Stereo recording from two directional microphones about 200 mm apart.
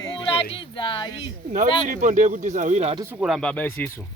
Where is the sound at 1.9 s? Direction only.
40° right (ahead or behind).